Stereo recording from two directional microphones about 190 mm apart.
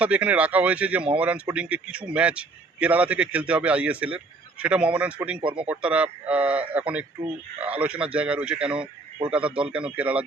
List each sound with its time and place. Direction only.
0.0 s a man's voice: 10° right (ahead or behind)
5.4 s speech: 25° right (ahead or behind)
5.6 s a man's voice: 5° right (ahead or behind)
8.8 s a man's voice: 30° right (ahead or behind)
9.3 s a man's voice: 5° right (ahead or behind)